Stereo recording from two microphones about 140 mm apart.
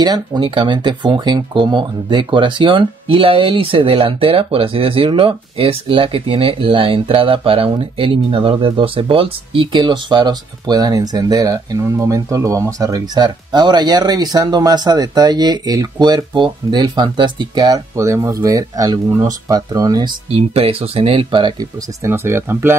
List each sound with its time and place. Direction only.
0.0 s speech: 30° right (ahead or behind)
20.2 s speech: 45° right (ahead or behind)
22.0 s speech: 20° right (ahead or behind)